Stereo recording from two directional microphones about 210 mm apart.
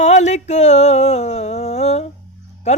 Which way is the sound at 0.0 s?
30° left (ahead or behind).